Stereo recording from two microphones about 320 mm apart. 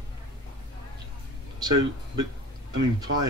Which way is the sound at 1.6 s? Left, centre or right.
Right.